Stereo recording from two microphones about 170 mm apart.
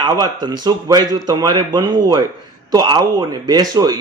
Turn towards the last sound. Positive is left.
turn(degrees=-20)  # may be behind; listen again after turning